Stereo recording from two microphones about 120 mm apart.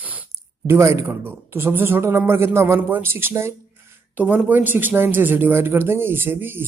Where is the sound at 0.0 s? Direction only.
15° right (ahead or behind).